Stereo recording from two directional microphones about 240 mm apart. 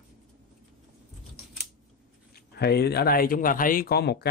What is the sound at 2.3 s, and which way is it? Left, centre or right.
Speech, left.